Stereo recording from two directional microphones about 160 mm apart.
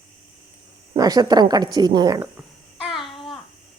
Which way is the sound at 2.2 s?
5° right (ahead or behind).